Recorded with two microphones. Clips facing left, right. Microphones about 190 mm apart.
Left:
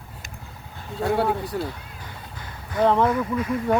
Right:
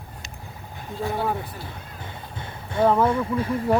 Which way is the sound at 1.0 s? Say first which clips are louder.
Left 4 dB; 70° left (ahead or behind).